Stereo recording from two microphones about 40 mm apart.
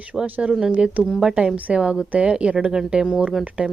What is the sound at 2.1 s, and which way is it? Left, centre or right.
Speech, right.